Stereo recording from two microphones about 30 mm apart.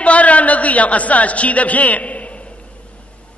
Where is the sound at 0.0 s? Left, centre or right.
Left.